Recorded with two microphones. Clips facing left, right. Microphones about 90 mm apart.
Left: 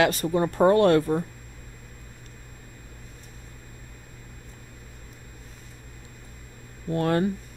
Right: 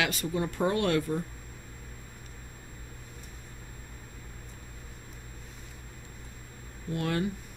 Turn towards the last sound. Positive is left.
turn(degrees=40)  # may be behind; listen again after turning